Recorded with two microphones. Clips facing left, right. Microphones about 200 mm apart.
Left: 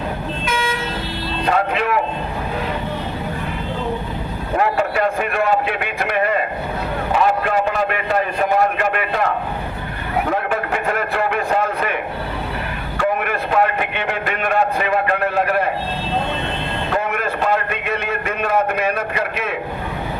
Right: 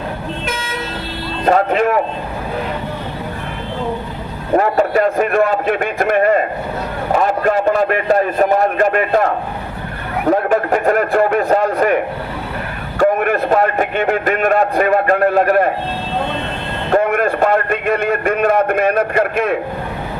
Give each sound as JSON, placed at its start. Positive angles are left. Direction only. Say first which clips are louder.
{"t": 1.5, "sound": "a man's voice", "louder": "right 6 dB", "side_deg": -45}
{"t": 4.5, "sound": "a man's voice", "louder": "right 5 dB", "side_deg": -40}
{"t": 10.2, "sound": "a man's voice", "louder": "right 11 dB", "side_deg": -40}
{"t": 13.0, "sound": "a man's voice", "louder": "right 7 dB", "side_deg": -45}
{"t": 16.9, "sound": "a man's voice", "louder": "right 9 dB", "side_deg": -50}